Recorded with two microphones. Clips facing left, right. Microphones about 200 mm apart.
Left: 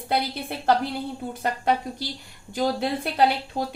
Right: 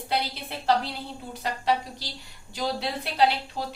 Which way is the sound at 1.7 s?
55° left (ahead or behind).